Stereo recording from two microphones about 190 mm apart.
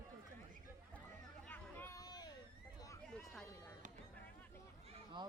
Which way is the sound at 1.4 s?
10° left (ahead or behind).